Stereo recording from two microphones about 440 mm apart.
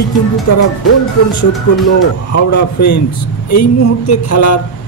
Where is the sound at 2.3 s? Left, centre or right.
Left.